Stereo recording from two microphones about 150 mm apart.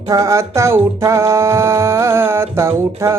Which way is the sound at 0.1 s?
20° right (ahead or behind).